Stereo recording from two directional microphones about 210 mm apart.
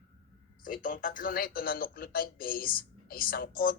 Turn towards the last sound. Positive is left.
turn(degrees=45)  # may be behind; listen again after turning